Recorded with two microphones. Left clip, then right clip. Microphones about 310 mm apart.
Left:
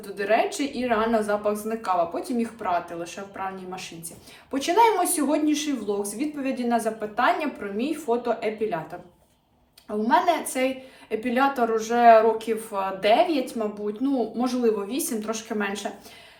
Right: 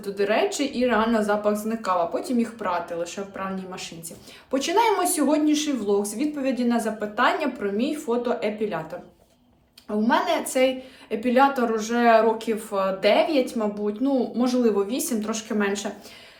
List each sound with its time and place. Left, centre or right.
0.0 s speech: centre
10.0 s speech: centre